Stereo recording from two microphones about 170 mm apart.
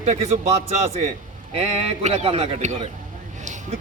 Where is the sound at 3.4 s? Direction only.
45° right (ahead or behind).